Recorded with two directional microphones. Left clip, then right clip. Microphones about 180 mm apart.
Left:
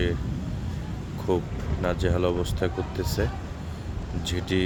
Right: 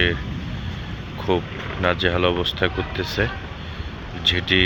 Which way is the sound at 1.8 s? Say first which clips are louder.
Right 6 dB; 15° left (ahead or behind).